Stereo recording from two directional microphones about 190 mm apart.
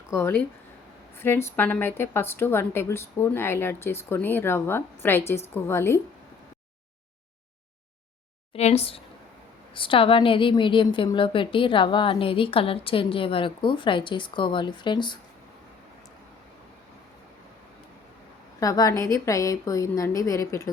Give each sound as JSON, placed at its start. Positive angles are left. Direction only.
{"t": 0.1, "sound": "a woman's voice", "side_deg": 15}
{"t": 8.5, "sound": "a woman's voice", "side_deg": 35}
{"t": 18.6, "sound": "a woman's voice", "side_deg": 20}